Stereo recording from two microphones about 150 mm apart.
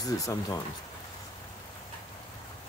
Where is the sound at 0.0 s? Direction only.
25° left (ahead or behind).